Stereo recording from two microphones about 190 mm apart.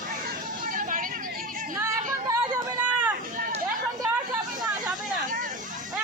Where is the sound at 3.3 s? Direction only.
45° right (ahead or behind).